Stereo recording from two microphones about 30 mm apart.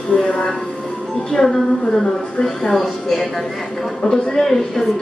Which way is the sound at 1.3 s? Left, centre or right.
Centre.